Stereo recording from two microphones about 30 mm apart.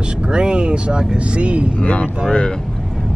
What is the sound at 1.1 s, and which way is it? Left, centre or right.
Speech, right.